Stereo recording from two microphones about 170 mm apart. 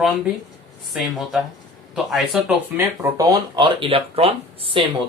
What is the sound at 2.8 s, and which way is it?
Speech, 15° right (ahead or behind).